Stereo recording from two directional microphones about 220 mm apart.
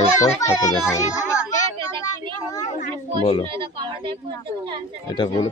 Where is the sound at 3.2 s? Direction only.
25° left (ahead or behind).